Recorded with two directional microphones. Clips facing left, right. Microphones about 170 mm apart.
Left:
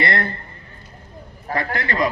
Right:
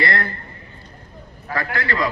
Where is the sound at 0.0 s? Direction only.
25° left (ahead or behind).